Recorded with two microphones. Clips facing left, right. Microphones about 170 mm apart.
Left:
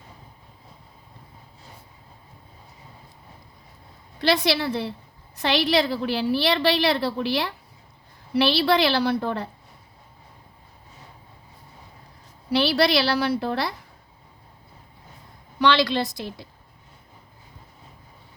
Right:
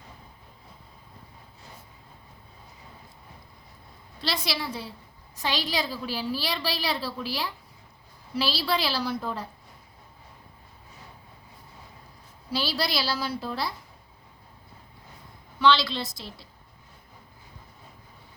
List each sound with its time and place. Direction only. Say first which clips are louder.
4.3 s a woman's voice: left 9 dB; 65° left (ahead or behind)
12.5 s a woman's voice: left 9 dB; 70° left (ahead or behind)
15.6 s a woman's voice: left 3 dB; 65° left (ahead or behind)